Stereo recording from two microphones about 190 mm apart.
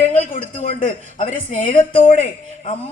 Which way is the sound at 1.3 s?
45° left (ahead or behind).